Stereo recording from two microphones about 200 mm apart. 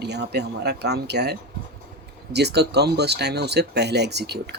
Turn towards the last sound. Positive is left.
turn(degrees=-55)  # may be behind; listen again after turning